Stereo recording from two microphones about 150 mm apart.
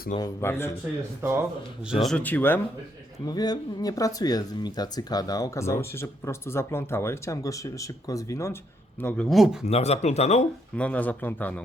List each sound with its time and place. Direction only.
0.2 s a man's voice: 20° left (ahead or behind)
1.9 s a man's voice: centre (ahead or behind)
3.2 s a man's voice: 25° left (ahead or behind)
9.3 s speech: centre (ahead or behind)
9.6 s speech: 45° left (ahead or behind)
10.8 s a man's voice: 10° left (ahead or behind)